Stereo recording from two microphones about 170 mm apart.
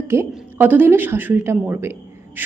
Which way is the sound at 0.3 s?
10° right (ahead or behind).